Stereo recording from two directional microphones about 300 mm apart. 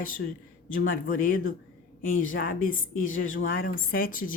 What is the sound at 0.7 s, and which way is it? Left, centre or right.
A woman's voice, left.